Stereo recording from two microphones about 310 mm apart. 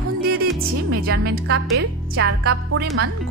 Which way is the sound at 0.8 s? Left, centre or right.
Right.